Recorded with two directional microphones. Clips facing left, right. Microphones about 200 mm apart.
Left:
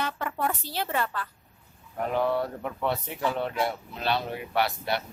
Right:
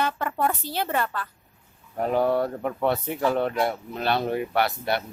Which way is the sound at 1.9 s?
40° right (ahead or behind).